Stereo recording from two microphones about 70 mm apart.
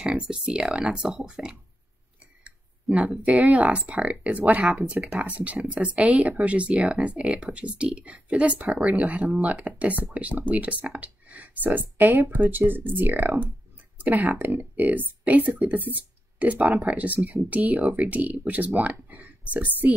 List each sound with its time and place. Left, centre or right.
0.0 s speech: centre